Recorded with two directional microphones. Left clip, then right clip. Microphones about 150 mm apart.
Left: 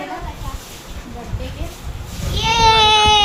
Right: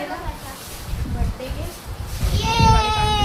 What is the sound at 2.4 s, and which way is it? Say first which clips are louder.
Baby cry: left 6 dB; 90° left.